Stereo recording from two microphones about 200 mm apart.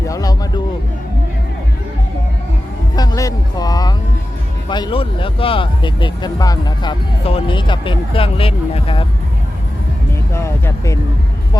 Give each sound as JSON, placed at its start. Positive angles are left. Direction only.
{"t": 0.1, "sound": "a sound", "side_deg": 20}
{"t": 2.9, "sound": "music", "side_deg": 20}
{"t": 4.7, "sound": "speech", "side_deg": 25}
{"t": 10.3, "sound": "speech", "side_deg": 15}